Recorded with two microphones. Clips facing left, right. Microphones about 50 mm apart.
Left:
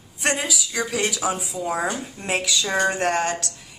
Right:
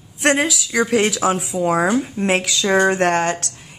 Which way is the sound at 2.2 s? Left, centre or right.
Right.